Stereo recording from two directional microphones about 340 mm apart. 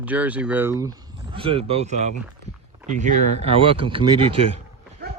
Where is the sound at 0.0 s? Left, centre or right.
Centre.